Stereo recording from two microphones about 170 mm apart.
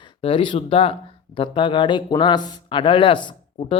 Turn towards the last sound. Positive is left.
turn(degrees=30)  # may be behind; listen again after turning